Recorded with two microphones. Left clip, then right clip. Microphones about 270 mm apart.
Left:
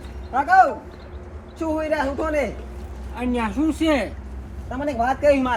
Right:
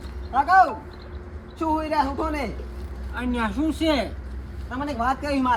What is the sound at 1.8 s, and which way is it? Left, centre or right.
Speech, right.